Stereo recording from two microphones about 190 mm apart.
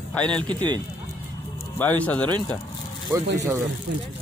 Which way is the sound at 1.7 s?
10° left (ahead or behind).